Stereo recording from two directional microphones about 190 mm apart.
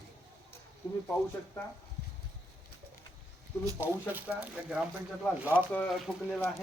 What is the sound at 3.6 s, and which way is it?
Speech, 15° right (ahead or behind).